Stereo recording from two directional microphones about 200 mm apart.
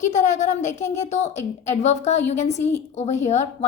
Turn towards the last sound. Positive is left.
turn(degrees=35)  # may be behind; listen again after turning